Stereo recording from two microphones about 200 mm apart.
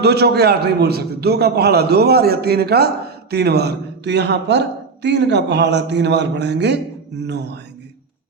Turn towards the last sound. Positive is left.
turn(degrees=-60)  # may be behind; listen again after turning